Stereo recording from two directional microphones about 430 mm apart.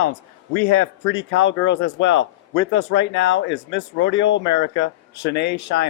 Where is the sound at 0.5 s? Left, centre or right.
Left.